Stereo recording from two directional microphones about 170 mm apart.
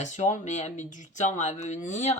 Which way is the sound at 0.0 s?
45° left (ahead or behind).